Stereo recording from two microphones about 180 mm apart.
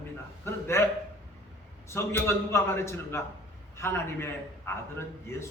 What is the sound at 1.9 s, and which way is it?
A man's voice, 15° left (ahead or behind).